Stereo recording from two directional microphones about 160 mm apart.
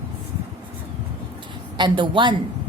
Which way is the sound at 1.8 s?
30° right (ahead or behind).